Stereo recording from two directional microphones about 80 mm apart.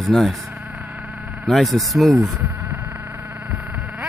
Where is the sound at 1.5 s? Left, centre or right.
Centre.